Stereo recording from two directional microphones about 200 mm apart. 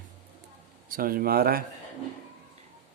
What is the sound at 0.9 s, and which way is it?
Speech, 45° right (ahead or behind).